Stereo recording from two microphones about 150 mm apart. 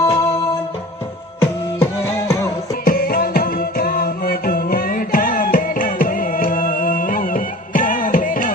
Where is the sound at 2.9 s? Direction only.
80° left.